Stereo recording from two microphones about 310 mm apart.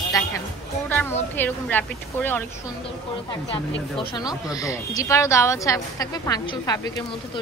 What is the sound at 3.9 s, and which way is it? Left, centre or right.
Speech, centre.